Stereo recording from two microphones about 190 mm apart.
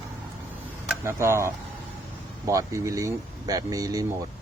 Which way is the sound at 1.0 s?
15° right (ahead or behind).